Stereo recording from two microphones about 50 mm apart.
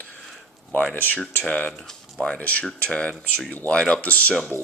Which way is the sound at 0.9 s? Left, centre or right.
Left.